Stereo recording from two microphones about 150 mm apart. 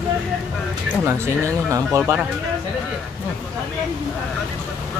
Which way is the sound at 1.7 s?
20° right (ahead or behind).